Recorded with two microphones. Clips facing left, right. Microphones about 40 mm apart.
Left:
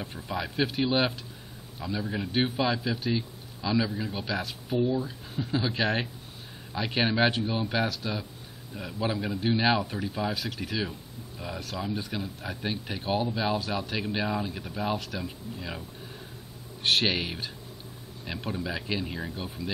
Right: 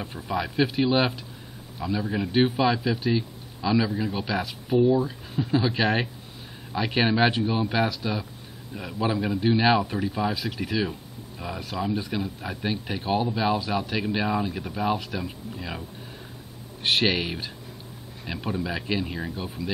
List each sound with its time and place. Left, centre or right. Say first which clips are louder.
0.3 s a man's voice: right 4 dB; centre
5.6 s a man's voice: right 3 dB; centre
9.4 s a man's voice: right 4 dB; centre
9.8 s a man's voice: right 5 dB; right
10.0 s a man's voice: right 4 dB; centre
10.4 s a man's voice: right 5 dB; right
17.0 s a man's voice: right 4 dB; centre